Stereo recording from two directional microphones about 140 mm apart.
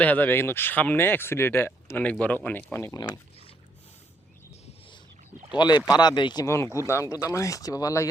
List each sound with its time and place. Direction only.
0.0 s speech: 10° left (ahead or behind); by 3.2 s 25° left (ahead or behind)
5.5 s speech: 30° left (ahead or behind)